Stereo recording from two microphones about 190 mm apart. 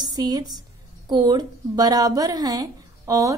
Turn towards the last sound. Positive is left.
turn(degrees=-15)  # may be behind; listen again after turning